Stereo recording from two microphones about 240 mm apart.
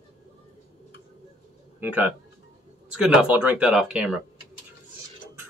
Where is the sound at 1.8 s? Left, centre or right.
Centre.